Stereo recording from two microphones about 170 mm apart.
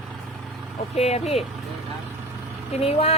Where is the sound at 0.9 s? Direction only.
40° left (ahead or behind).